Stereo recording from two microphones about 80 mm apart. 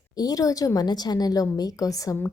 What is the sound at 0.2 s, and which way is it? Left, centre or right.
A woman's voice, left.